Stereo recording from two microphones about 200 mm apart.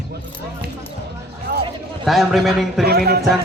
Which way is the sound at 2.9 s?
50° right (ahead or behind).